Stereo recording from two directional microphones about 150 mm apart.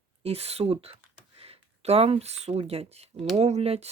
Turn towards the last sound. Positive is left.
turn(degrees=-45)  # may be behind; listen again after turning